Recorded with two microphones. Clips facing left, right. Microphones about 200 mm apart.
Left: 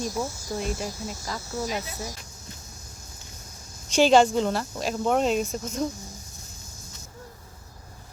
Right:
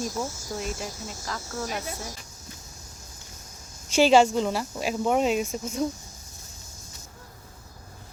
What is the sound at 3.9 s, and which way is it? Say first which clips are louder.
Speech: even; 5° right (ahead or behind).